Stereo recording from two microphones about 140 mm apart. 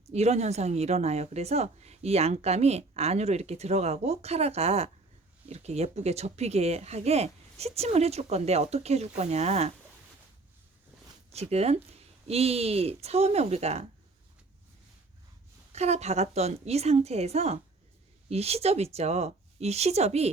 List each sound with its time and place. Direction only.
0.1 s a woman's voice: 50° right (ahead or behind)
11.3 s a woman's voice: 50° right (ahead or behind)
15.7 s a woman's voice: 50° right (ahead or behind)